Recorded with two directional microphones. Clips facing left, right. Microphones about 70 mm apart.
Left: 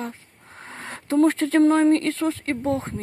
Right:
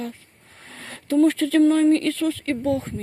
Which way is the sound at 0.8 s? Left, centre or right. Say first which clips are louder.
Right 2 dB; left.